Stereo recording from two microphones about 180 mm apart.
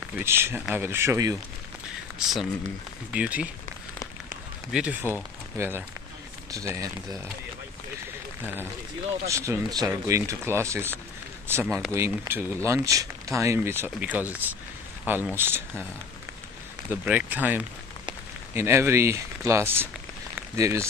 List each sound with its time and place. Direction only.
0.2 s speech: 15° right (ahead or behind)
2.1 s speech: centre (ahead or behind)
4.7 s speech: 5° right (ahead or behind)
9.3 s speech: 15° right (ahead or behind)
16.9 s speech: 10° right (ahead or behind)
20.3 s rain on surface: 15° right (ahead or behind)